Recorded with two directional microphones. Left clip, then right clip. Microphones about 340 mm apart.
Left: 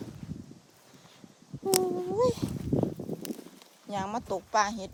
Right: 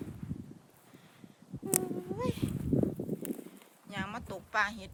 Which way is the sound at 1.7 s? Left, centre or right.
Centre.